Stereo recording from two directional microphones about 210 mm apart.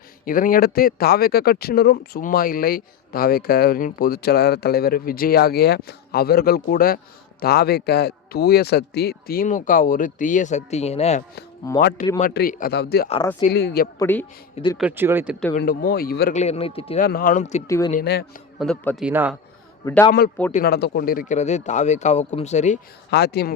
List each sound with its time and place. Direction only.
0.3 s speech: 40° left (ahead or behind)
11.8 s speech: 50° left (ahead or behind)
14.0 s a man's voice: 10° left (ahead or behind)
14.5 s speech: 20° left (ahead or behind)
14.8 s speech: 10° right (ahead or behind)
15.5 s speech: 45° left (ahead or behind)
16.4 s speech: 30° left (ahead or behind)
17.0 s speech: 45° left (ahead or behind)
17.7 s a man's voice: 15° left (ahead or behind)
18.0 s speech: 50° left (ahead or behind)
18.6 s a man's voice: centre (ahead or behind)
19.8 s a man's voice: 10° left (ahead or behind)
20.5 s speech: 45° left (ahead or behind)
23.1 s speech: 50° left (ahead or behind)